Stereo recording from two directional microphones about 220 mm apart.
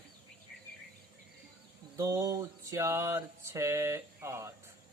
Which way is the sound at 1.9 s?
15° right (ahead or behind).